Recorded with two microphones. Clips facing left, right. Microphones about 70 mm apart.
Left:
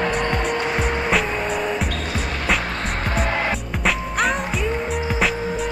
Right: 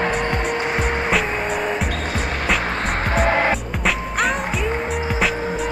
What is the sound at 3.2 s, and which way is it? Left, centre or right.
Music, right.